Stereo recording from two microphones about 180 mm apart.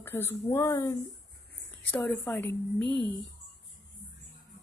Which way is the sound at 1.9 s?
5° left (ahead or behind).